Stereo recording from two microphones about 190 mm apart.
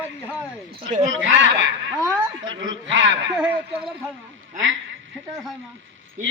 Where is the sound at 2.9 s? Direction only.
80° right.